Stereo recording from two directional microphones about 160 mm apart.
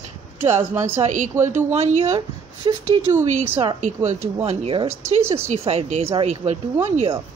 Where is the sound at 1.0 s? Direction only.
50° right (ahead or behind).